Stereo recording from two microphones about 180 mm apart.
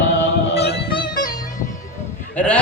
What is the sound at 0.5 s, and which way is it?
Music, 65° left (ahead or behind).